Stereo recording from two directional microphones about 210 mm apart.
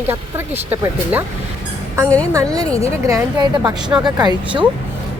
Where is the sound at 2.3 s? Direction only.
15° right (ahead or behind).